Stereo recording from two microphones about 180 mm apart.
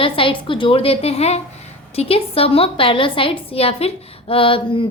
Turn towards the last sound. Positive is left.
turn(degrees=30)  # may be behind; listen again after turning